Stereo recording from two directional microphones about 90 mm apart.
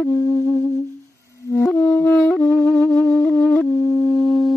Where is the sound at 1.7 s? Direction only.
10° left (ahead or behind).